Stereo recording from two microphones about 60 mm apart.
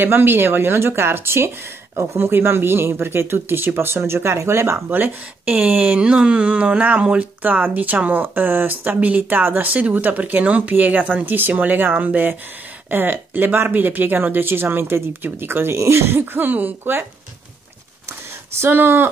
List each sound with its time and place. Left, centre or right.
0.0 s speech: right
18.6 s speech: right